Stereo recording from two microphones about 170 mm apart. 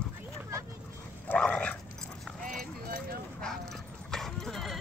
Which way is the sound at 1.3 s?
5° left (ahead or behind).